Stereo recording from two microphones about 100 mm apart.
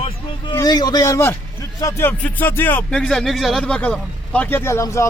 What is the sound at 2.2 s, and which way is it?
Speech, 20° left (ahead or behind).